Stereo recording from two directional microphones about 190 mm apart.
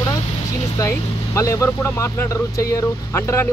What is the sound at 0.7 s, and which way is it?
Speech, 15° left (ahead or behind).